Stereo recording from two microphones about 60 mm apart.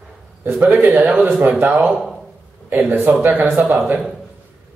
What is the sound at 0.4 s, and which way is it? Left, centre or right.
Speech, right.